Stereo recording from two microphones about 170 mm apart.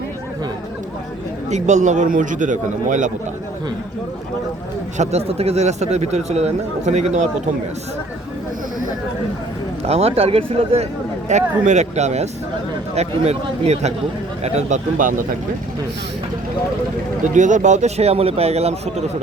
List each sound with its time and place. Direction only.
1.5 s a man's voice: 45° right (ahead or behind)
4.9 s speech: 40° right (ahead or behind)
9.8 s a man's voice: 35° right (ahead or behind)
17.2 s speech: 45° right (ahead or behind)